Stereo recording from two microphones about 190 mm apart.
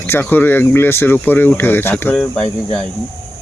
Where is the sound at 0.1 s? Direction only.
10° left (ahead or behind).